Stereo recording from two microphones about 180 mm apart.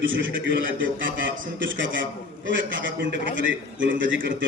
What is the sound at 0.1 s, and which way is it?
A man's voice, 90° right.